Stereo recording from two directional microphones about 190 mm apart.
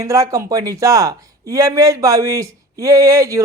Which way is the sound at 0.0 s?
15° right (ahead or behind).